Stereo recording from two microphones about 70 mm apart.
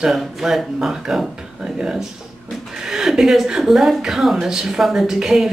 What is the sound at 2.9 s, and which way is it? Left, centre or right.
Speech, centre.